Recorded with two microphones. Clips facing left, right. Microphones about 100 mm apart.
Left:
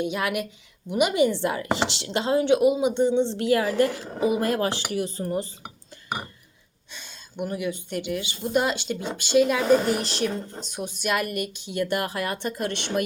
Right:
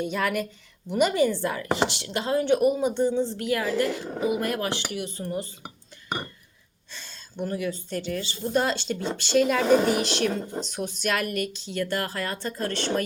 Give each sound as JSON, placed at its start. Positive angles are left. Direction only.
{"t": 0.0, "sound": "speech", "side_deg": 10}
{"t": 6.9, "sound": "speech", "side_deg": 15}